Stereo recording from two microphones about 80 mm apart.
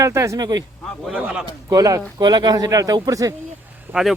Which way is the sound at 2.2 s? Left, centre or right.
Right.